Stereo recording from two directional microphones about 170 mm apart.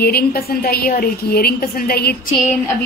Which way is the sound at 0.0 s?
65° left (ahead or behind).